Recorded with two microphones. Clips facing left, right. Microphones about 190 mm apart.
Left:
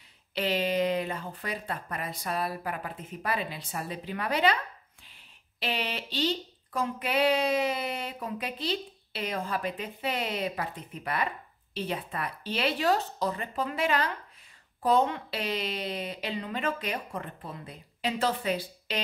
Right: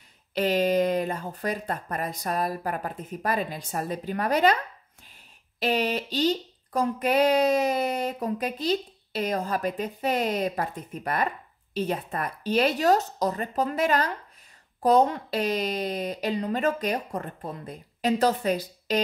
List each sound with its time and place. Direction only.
0.3 s speech: 45° right (ahead or behind)
5.6 s speech: 40° right (ahead or behind)